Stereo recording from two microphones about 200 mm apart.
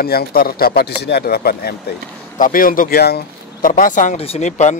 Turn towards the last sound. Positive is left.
turn(degrees=35)  # may be behind; listen again after turning